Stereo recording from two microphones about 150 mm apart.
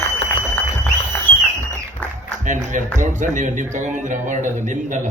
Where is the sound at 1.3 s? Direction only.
10° left (ahead or behind).